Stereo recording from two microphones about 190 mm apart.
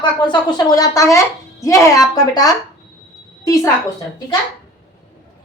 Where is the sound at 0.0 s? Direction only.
20° left (ahead or behind).